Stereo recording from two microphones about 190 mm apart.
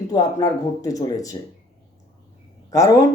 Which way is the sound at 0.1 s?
20° left (ahead or behind).